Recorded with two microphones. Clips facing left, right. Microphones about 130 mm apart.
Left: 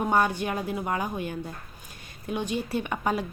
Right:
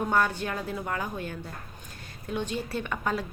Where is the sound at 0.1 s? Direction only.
15° left (ahead or behind).